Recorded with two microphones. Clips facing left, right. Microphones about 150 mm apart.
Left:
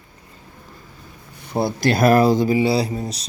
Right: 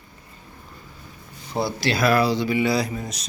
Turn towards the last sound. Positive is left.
turn(degrees=35)  # may be behind; listen again after turning